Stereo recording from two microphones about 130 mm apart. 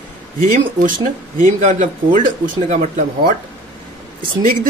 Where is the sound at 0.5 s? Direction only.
90° right.